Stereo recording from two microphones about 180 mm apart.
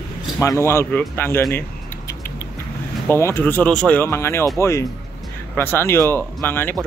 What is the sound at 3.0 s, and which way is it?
Speech, 15° left (ahead or behind).